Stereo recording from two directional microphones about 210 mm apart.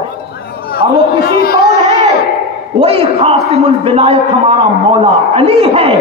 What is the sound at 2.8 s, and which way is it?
A man's voice, 25° right (ahead or behind).